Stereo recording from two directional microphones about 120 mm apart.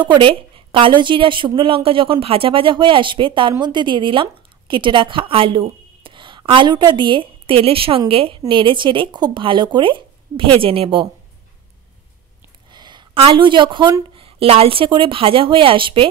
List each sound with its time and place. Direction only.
0.0 s a woman's voice: 45° right (ahead or behind)
12.7 s a sound: 40° right (ahead or behind)
13.2 s a woman's voice: 40° right (ahead or behind)